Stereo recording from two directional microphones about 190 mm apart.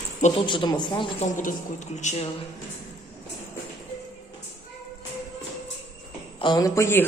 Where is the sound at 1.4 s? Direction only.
40° left (ahead or behind).